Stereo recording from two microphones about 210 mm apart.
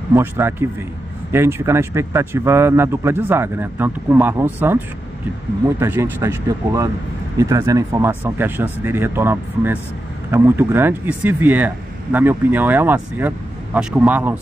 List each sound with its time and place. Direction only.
0.1 s speech: 10° right (ahead or behind)